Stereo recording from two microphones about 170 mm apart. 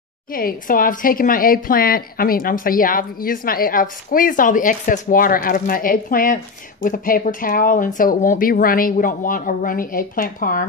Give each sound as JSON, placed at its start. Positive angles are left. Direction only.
{"t": 0.3, "sound": "a woman's voice", "side_deg": 55}